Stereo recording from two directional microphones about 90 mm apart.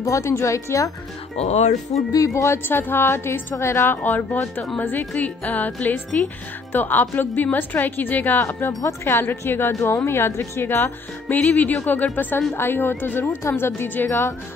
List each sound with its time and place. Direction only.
0.0 s speech: 35° left (ahead or behind)
2.1 s a woman's voice: 35° left (ahead or behind)